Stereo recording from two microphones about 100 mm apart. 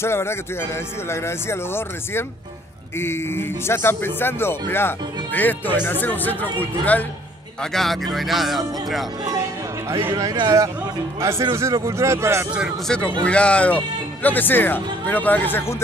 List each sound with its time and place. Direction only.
0.0 s a man's voice: 25° left (ahead or behind)
7.7 s speech: centre (ahead or behind)
10.1 s a man's voice: 40° right (ahead or behind)
11.1 s speech: 30° right (ahead or behind)
12.8 s speech: 10° left (ahead or behind)